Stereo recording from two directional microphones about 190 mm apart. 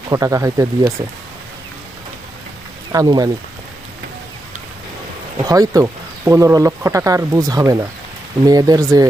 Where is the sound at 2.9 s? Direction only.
20° right (ahead or behind).